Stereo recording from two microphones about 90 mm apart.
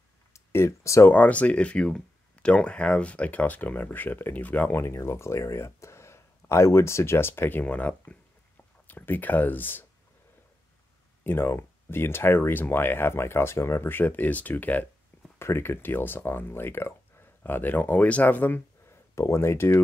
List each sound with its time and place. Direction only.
0.3 s a sound: 30° left (ahead or behind)
1.1 s speech: 15° left (ahead or behind)
11.2 s speech: 25° left (ahead or behind)